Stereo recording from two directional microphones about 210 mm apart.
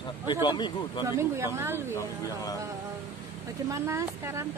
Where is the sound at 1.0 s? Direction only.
10° right (ahead or behind).